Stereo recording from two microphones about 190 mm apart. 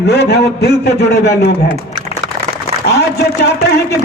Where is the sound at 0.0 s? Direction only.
60° left (ahead or behind).